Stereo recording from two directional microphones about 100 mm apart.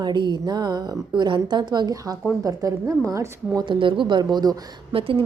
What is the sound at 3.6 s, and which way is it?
Speech, 55° right (ahead or behind).